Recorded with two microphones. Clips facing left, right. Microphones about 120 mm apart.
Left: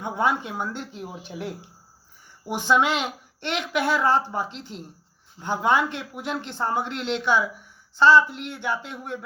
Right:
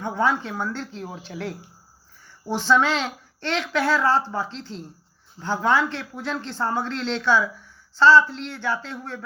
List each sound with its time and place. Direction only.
0.0 s speech: 15° left (ahead or behind)